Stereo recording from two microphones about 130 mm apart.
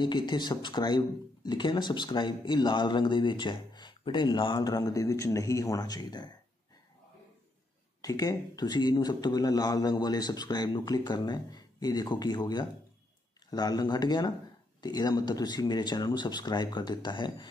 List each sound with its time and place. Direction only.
0.0 s speech: 35° left (ahead or behind)
8.0 s speech: 25° left (ahead or behind)